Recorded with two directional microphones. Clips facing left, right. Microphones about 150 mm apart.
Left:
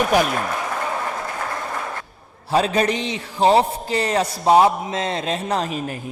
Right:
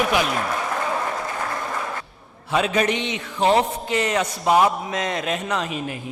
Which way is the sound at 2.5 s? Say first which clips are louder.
Left 2 dB; 35° left (ahead or behind).